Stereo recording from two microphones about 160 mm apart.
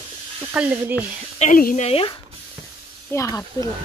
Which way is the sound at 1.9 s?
35° left (ahead or behind).